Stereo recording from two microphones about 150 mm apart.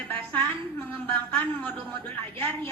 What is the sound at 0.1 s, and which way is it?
A woman's voice, 10° left (ahead or behind).